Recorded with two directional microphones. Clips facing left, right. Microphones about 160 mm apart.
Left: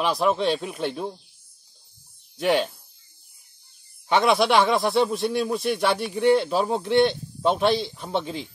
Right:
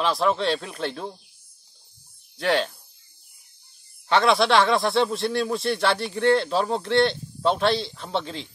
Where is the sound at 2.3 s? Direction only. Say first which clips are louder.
Left 1 dB; 15° left (ahead or behind).